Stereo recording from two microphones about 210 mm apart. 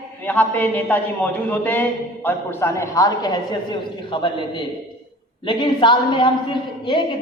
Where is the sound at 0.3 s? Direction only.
10° left (ahead or behind).